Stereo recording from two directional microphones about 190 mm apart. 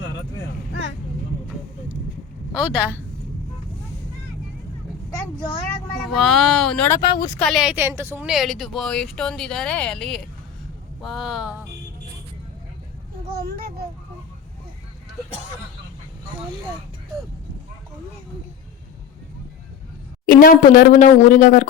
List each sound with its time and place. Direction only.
2.6 s a woman's voice: 5° right (ahead or behind)
6.1 s a woman's voice: centre (ahead or behind)
7.0 s speech: 20° left (ahead or behind)
7.3 s a woman's voice: 5° left (ahead or behind)
20.2 s speech: 45° left (ahead or behind)